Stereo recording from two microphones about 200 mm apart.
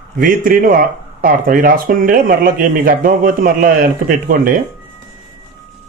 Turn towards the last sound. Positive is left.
turn(degrees=-45)  # may be behind; listen again after turning